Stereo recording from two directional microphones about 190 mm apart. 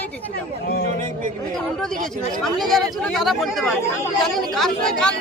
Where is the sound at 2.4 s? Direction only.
Centre (ahead or behind).